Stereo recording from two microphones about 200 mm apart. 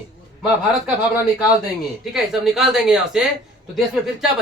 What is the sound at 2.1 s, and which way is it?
A man's voice, centre (ahead or behind).